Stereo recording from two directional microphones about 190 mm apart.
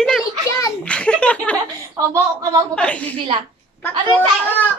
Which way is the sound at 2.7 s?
5° left (ahead or behind).